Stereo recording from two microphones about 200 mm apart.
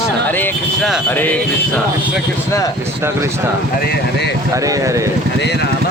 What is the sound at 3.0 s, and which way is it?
Speech, 15° right (ahead or behind).